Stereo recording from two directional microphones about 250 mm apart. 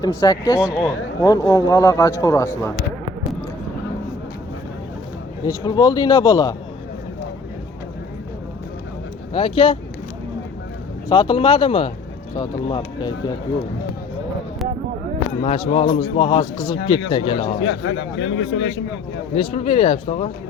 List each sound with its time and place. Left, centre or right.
0.2 s a man's voice: centre
0.5 s speech: centre
1.2 s a man's voice: centre
5.5 s a man's voice: centre
9.3 s a man's voice: centre
11.1 s a man's voice: centre
15.4 s a man's voice: centre
17.6 s speech: left
19.5 s a man's voice: left